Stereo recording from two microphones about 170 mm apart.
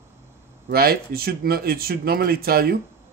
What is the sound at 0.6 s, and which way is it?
A man's voice, 65° right (ahead or behind).